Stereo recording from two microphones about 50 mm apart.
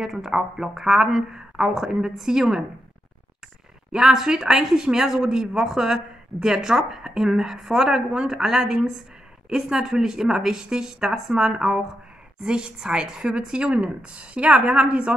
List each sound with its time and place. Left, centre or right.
0.0 s speech: centre
3.9 s a woman's voice: centre